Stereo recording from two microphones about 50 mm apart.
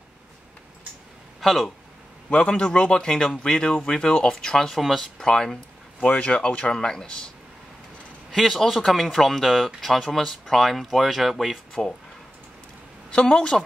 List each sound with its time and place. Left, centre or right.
1.4 s speech: centre
2.2 s speech: centre
5.3 s speech: centre
5.9 s speech: left
8.3 s speech: centre
13.2 s speech: centre